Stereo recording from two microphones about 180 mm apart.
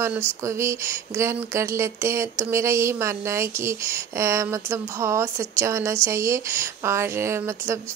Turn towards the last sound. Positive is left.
turn(degrees=-15)  # may be behind; listen again after turning